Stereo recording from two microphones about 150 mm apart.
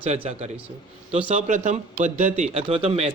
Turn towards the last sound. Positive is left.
turn(degrees=-45)  # may be behind; listen again after turning